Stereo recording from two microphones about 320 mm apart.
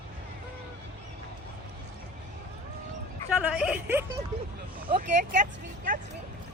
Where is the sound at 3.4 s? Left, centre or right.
Centre.